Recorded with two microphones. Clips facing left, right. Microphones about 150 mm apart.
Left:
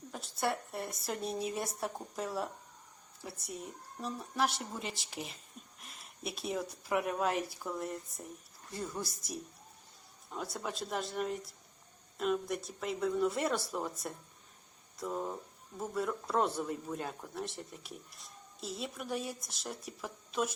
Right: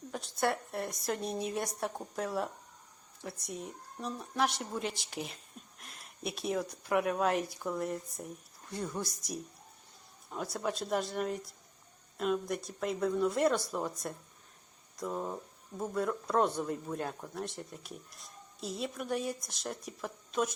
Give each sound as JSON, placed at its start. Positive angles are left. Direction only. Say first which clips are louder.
{"t": 0.1, "sound": "speech", "louder": "right 3 dB", "side_deg": 0}